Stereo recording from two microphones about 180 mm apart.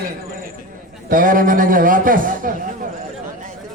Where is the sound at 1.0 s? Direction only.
50° right (ahead or behind).